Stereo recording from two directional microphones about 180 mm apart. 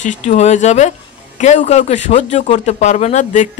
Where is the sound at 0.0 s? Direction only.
40° left (ahead or behind).